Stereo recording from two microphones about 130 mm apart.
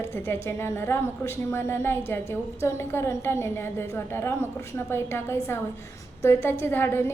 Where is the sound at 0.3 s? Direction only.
20° left (ahead or behind).